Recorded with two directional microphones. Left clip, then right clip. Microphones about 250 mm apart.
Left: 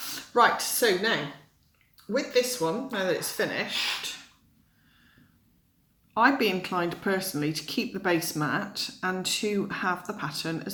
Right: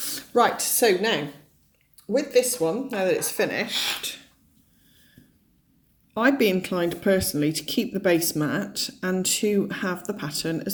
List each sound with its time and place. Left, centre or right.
0.0 s speech: right
2.1 s speech: right
6.1 s speech: right